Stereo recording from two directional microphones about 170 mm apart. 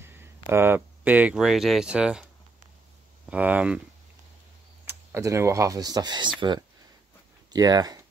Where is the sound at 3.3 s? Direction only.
10° right (ahead or behind).